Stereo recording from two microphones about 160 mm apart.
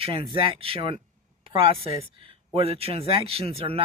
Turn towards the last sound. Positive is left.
turn(degrees=-35)  # may be behind; listen again after turning